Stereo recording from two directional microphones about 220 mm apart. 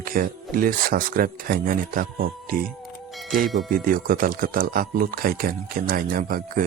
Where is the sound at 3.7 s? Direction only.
40° right (ahead or behind).